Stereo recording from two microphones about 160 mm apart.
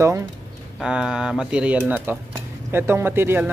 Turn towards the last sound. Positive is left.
turn(degrees=-15)  # may be behind; listen again after turning